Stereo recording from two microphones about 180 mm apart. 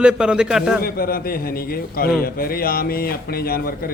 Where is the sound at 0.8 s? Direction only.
55° left (ahead or behind).